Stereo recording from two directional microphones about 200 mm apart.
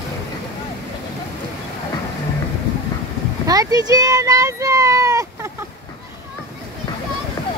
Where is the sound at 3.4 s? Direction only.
15° right (ahead or behind).